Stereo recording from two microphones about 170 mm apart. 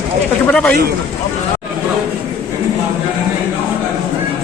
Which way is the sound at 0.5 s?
5° left (ahead or behind).